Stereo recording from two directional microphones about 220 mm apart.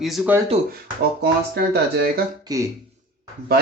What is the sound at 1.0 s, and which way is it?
Speech, 45° right (ahead or behind).